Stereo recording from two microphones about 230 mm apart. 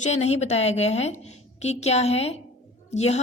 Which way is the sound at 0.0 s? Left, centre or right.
Left.